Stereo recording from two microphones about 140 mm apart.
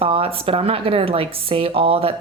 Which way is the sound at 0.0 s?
40° right (ahead or behind).